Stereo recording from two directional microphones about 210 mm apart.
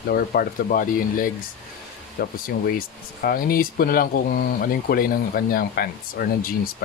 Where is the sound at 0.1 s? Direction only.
45° left (ahead or behind).